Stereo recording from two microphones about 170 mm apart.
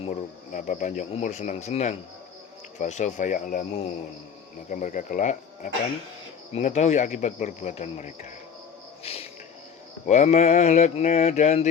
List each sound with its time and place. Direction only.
0.1 s speech: 45° left (ahead or behind)
9.0 s music: 35° left (ahead or behind)
10.1 s speech: 40° left (ahead or behind)